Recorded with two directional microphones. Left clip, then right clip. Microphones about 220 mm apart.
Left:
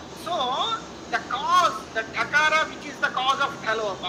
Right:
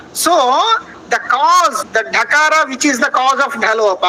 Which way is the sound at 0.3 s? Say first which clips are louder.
Right 14 dB; 60° right (ahead or behind).